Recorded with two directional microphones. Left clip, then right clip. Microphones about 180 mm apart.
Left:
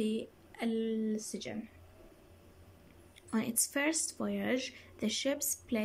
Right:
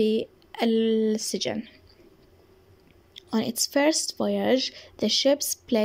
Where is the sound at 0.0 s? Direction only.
35° right (ahead or behind).